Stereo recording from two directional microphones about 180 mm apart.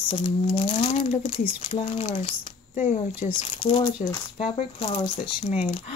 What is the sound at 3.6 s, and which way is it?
Speech, 25° left (ahead or behind).